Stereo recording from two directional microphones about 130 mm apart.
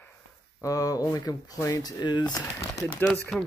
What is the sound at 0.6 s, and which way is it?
Speech, 25° left (ahead or behind).